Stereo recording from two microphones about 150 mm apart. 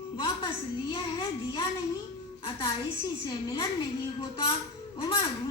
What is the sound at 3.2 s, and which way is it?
Speech, 25° left (ahead or behind).